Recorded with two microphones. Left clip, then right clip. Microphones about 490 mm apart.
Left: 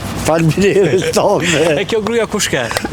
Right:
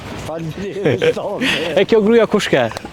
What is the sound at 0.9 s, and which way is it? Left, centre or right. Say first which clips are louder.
Speech: even; right.